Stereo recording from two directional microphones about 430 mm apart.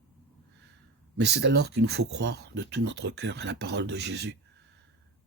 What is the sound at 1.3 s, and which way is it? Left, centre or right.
Speech, right.